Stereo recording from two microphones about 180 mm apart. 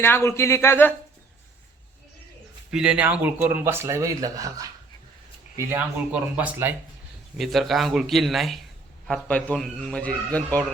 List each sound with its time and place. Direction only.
0.0 s a man's voice: 15° left (ahead or behind)
2.6 s a man's voice: 5° right (ahead or behind)